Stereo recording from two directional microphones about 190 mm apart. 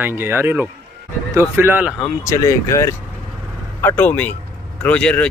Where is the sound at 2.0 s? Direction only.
15° left (ahead or behind).